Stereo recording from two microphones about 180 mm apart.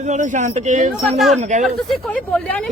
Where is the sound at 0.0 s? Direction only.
45° right (ahead or behind).